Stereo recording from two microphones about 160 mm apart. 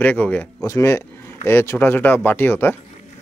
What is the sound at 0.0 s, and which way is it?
A man's voice, 10° left (ahead or behind).